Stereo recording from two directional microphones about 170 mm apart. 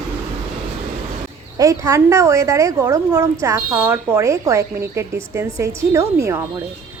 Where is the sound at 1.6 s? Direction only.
20° right (ahead or behind).